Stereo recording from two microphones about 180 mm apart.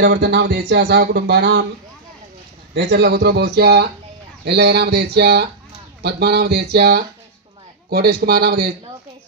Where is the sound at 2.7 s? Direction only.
65° right (ahead or behind).